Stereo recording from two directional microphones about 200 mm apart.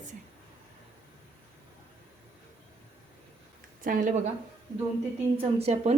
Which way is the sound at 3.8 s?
45° right (ahead or behind).